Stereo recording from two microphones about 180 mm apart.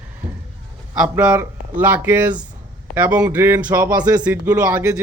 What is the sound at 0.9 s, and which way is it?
Speech, 5° right (ahead or behind).